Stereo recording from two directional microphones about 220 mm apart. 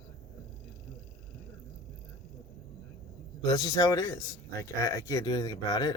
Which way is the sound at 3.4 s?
15° left (ahead or behind).